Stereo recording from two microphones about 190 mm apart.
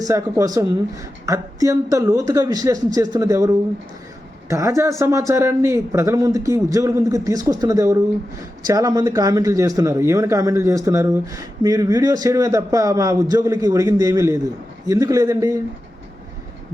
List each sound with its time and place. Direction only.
0.0 s speech: 20° right (ahead or behind)